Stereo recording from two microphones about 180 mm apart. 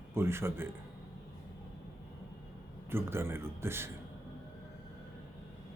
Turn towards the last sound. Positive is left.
turn(degrees=-15)  # may be behind; listen again after turning